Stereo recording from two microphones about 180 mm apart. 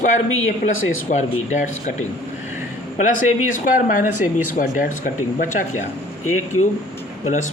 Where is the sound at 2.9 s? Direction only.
45° left (ahead or behind).